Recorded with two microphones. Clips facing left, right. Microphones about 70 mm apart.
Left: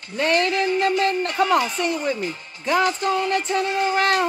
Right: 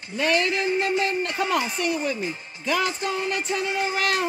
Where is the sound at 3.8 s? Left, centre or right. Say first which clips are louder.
Left 5 dB; left.